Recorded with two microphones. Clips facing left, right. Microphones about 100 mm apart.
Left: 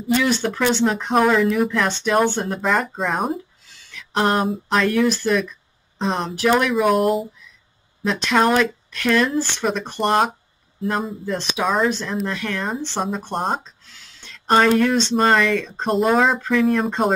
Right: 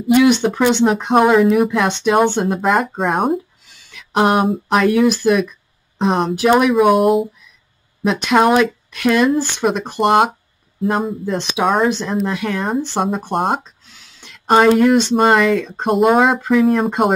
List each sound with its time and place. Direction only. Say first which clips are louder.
0.0 s speech: right 7 dB; 15° right (ahead or behind)
2.4 s speech: right 5 dB; 5° right (ahead or behind)
3.9 s a sound: right 5 dB; 15° right (ahead or behind)
4.5 s speech: right 5 dB; 10° right (ahead or behind)
6.7 s speech: right 5 dB; 5° right (ahead or behind)
8.0 s speech: right 4 dB; 15° right (ahead or behind)
11.6 s speech: right 5 dB; 25° right (ahead or behind)
12.1 s speech: right 5 dB; 10° right (ahead or behind)